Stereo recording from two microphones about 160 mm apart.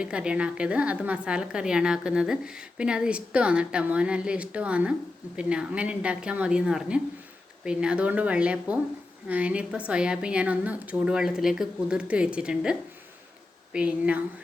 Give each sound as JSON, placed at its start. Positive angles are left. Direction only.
{"t": 0.0, "sound": "a woman's voice", "side_deg": -5}
{"t": 13.7, "sound": "a woman's voice", "side_deg": -10}